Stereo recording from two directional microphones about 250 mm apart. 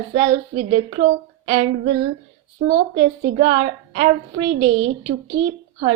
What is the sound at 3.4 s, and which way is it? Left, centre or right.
A woman's voice, right.